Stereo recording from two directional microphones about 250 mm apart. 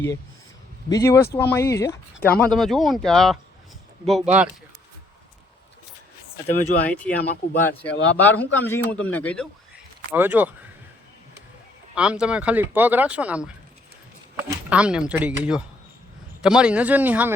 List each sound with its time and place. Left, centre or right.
0.9 s a man's voice: centre
6.9 s speech: centre
7.2 s speech: left
8.2 s a man's voice: centre
10.1 s speech: centre
11.9 s speech: centre